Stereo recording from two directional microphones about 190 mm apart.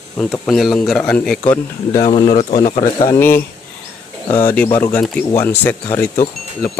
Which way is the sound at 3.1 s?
10° left (ahead or behind).